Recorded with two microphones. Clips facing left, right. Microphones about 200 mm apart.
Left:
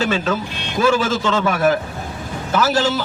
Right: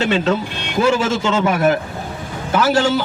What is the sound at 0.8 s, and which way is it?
A man's voice, 20° right (ahead or behind).